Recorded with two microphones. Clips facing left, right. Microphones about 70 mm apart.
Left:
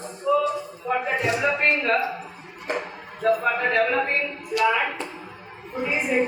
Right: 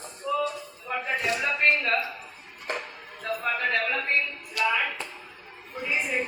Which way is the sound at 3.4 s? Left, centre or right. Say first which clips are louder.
Left 5 dB; centre.